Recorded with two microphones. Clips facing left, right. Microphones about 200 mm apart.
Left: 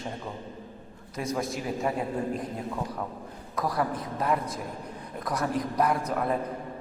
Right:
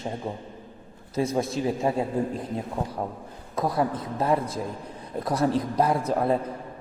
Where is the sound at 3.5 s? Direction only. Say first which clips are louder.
Right 3 dB; 25° right (ahead or behind).